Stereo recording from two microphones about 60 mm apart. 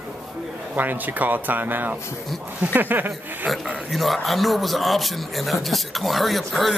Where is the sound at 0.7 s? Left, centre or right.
Right.